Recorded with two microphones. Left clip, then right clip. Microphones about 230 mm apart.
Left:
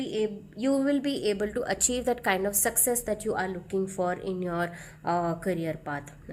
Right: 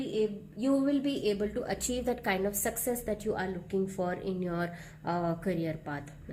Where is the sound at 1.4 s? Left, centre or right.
Left.